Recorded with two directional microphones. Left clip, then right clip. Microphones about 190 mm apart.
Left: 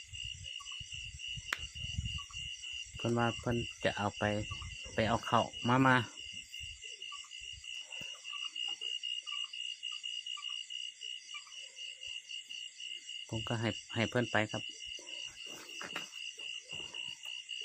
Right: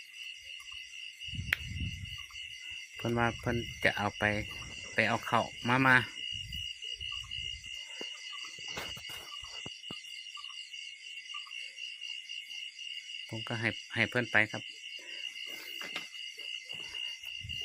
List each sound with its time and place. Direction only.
3.0 s speech: 10° right (ahead or behind); by 6.1 s 5° left (ahead or behind)
13.3 s speech: 5° left (ahead or behind)
15.8 s a sound: centre (ahead or behind)